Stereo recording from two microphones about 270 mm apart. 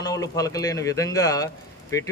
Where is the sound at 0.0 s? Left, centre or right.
Centre.